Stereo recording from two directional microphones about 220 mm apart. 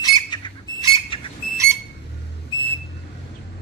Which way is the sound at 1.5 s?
15° right (ahead or behind).